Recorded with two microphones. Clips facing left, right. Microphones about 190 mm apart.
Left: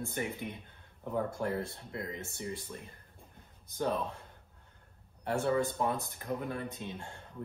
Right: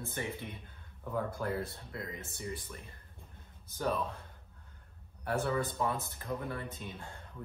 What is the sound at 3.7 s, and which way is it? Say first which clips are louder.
Speech: left 1 dB; 15° left (ahead or behind).